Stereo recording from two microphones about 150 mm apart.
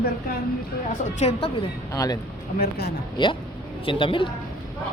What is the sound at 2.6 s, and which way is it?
Speech, 90° left.